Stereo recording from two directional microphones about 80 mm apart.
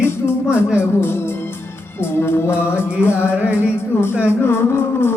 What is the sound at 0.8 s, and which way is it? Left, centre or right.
Speech, left.